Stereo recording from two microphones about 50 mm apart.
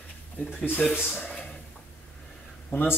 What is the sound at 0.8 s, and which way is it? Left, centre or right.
Speech, centre.